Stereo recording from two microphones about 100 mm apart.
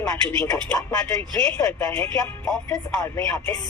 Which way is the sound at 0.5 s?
35° left (ahead or behind).